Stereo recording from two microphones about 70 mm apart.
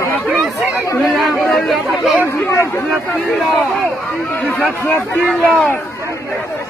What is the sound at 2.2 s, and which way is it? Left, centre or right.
Speech, left.